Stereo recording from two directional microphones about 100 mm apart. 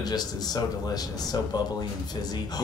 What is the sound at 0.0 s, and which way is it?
Speech, 45° left (ahead or behind).